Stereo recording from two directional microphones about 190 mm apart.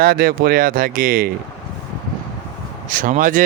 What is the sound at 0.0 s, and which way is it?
Speech, 50° right (ahead or behind).